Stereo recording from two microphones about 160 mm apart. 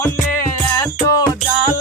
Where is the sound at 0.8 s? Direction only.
20° left (ahead or behind).